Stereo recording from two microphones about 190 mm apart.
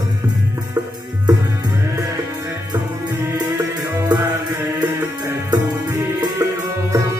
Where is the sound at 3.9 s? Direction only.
20° right (ahead or behind).